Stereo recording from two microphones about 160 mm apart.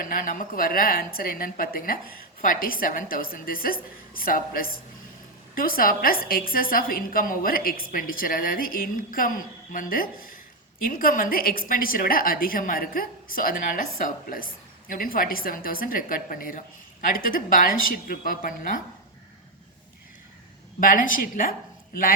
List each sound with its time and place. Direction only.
0.0 s a woman's voice: 60° left (ahead or behind)
20.8 s a woman's voice: 60° left (ahead or behind)